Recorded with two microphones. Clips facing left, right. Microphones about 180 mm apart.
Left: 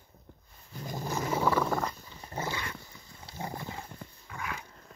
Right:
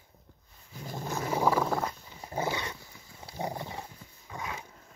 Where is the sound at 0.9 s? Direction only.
Centre (ahead or behind).